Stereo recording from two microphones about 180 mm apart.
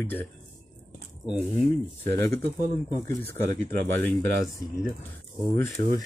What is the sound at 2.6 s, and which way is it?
Speech, 40° right (ahead or behind).